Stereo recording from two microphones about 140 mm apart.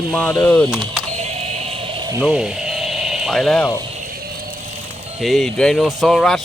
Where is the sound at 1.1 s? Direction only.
45° right (ahead or behind).